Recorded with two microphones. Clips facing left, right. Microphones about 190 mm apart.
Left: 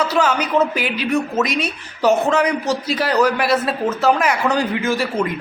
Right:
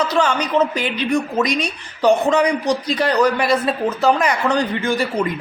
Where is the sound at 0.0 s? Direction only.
5° left (ahead or behind).